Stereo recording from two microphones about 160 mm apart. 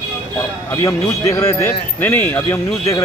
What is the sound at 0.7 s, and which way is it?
A man's voice, 20° left (ahead or behind).